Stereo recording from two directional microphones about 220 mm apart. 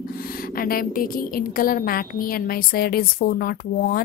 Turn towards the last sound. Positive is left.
turn(degrees=40)  # may be behind; listen again after turning